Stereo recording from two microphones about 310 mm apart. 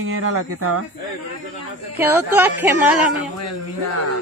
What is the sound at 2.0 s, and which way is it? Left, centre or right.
Speech, centre.